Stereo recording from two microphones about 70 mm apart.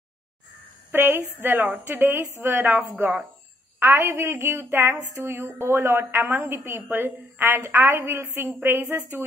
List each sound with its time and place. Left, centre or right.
0.9 s a woman's voice: right